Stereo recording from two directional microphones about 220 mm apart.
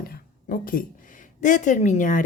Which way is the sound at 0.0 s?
40° left (ahead or behind).